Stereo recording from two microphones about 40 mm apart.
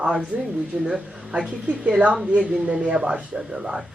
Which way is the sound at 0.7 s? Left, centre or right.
Right.